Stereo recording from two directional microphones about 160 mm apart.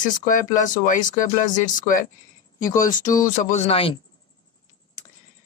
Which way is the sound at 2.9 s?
55° left (ahead or behind).